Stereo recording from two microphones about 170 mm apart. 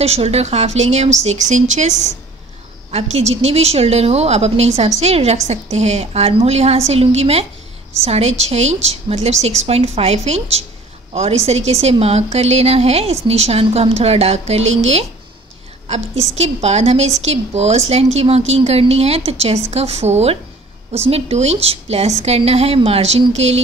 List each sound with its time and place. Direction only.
0.0 s a woman's voice: 35° right (ahead or behind)